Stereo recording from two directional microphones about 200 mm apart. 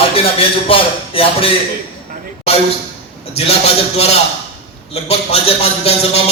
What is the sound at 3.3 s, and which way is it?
Speech, 30° left (ahead or behind).